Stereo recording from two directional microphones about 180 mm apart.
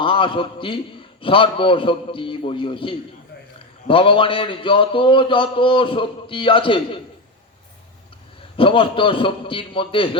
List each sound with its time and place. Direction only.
0.0 s a man's voice: 30° left (ahead or behind)
8.5 s a man's voice: 30° left (ahead or behind)